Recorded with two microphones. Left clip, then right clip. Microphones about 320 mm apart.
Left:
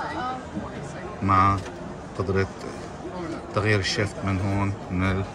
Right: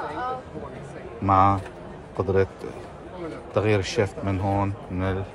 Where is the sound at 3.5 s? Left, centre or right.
Centre.